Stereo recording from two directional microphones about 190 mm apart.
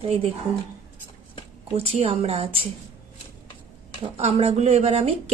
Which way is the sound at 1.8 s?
30° right (ahead or behind).